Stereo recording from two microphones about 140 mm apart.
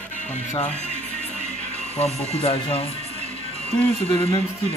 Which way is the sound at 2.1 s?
45° left (ahead or behind).